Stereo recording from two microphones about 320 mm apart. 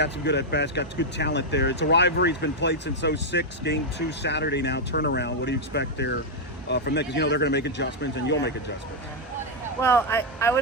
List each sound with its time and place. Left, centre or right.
0.0 s speech: left
9.8 s speech: centre